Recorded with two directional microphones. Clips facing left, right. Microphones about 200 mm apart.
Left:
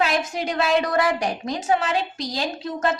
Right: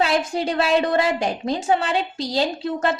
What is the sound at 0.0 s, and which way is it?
A woman's voice, 30° right (ahead or behind).